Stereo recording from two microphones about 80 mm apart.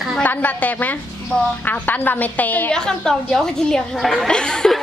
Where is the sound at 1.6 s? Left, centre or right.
Left.